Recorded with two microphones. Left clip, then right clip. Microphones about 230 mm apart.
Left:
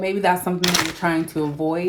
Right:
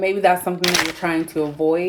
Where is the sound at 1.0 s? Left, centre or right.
Left.